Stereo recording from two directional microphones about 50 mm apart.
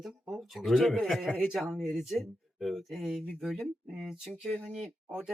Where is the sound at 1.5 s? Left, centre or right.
Centre.